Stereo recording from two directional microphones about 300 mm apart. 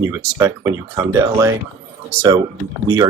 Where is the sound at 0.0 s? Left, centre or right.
Centre.